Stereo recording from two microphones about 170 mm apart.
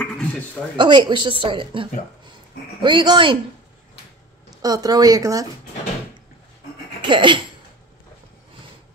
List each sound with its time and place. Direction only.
0.0 s dog: 5° left (ahead or behind)
0.7 s a woman's voice: 25° right (ahead or behind)
4.5 s a woman's voice: 20° right (ahead or behind)
7.0 s speech: 30° right (ahead or behind)